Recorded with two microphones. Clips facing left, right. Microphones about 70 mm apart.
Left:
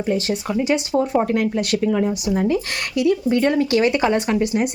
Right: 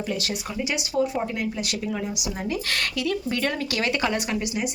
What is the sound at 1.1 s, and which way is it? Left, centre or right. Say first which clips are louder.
Speech: left 9 dB; left.